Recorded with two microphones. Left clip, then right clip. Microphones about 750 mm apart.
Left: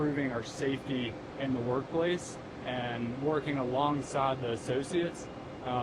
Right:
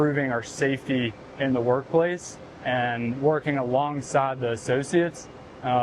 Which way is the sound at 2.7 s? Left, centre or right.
Right.